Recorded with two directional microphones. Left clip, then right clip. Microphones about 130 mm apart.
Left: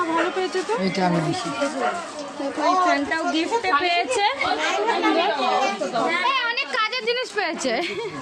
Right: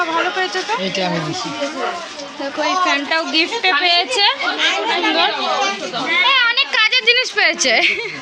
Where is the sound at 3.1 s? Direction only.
15° right (ahead or behind).